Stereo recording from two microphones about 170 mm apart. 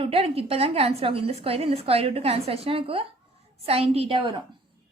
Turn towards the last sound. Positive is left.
turn(degrees=-30)  # may be behind; listen again after turning